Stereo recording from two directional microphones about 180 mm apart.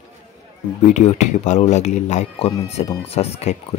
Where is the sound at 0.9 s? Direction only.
40° left (ahead or behind).